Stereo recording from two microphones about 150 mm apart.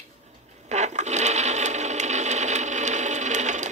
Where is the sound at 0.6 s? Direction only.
50° right (ahead or behind).